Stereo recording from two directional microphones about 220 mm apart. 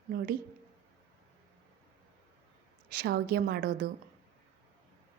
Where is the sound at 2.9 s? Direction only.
45° right (ahead or behind).